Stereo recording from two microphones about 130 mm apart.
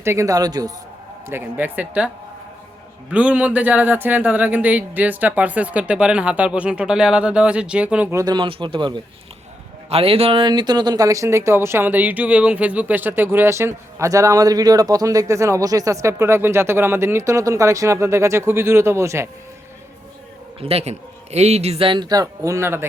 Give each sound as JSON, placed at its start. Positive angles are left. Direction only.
{"t": 0.0, "sound": "speech", "side_deg": -20}
{"t": 1.3, "sound": "speech", "side_deg": -15}
{"t": 3.1, "sound": "speech", "side_deg": -10}
{"t": 8.1, "sound": "speech", "side_deg": -30}
{"t": 9.9, "sound": "speech", "side_deg": -45}
{"t": 20.6, "sound": "a man's voice", "side_deg": -50}